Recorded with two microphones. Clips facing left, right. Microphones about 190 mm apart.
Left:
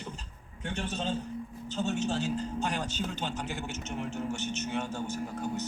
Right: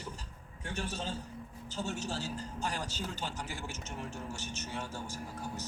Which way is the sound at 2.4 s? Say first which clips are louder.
Left 6 dB; 65° left (ahead or behind).